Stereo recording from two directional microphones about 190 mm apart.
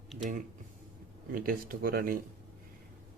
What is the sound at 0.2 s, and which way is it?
Speech, 40° right (ahead or behind).